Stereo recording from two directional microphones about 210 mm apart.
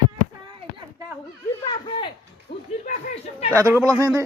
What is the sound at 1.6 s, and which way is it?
Speech, 20° left (ahead or behind).